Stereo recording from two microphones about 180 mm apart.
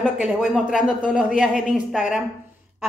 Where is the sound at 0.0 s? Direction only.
Centre (ahead or behind).